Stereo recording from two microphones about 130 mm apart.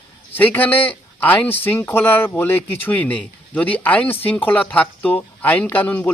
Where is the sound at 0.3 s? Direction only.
15° left (ahead or behind).